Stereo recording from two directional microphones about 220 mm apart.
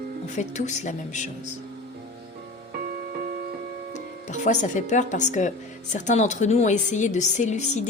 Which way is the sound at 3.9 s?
35° left (ahead or behind).